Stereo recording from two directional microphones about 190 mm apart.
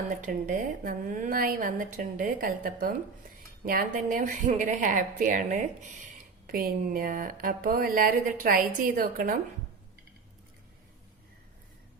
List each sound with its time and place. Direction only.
0.2 s a woman's voice: 45° right (ahead or behind)